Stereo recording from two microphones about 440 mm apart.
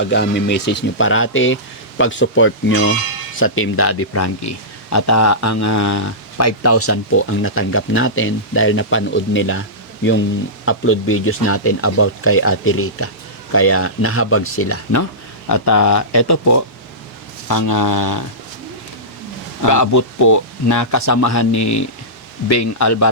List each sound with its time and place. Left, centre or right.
0.0 s speech: left
10.7 s speech: left
19.6 s speech: left